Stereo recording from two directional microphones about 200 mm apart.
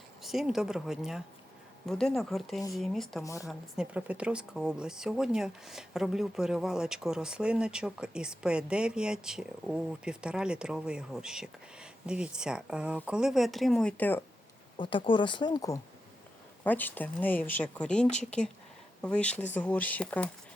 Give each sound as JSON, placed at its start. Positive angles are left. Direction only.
{"t": 0.2, "sound": "speech", "side_deg": 0}
{"t": 14.8, "sound": "speech", "side_deg": 25}
{"t": 16.6, "sound": "speech", "side_deg": 10}